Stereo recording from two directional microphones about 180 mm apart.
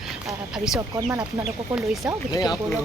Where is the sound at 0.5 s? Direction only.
5° right (ahead or behind).